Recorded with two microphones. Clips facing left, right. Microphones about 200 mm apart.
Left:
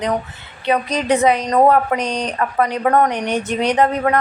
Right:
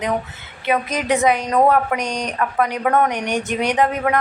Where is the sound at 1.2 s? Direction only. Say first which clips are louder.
Left 1 dB; 35° left (ahead or behind).